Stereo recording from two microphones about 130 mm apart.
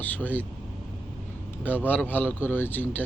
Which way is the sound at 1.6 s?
15° left (ahead or behind).